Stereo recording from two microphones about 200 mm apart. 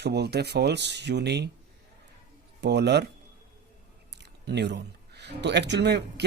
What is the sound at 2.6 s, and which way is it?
Speech, 60° right (ahead or behind).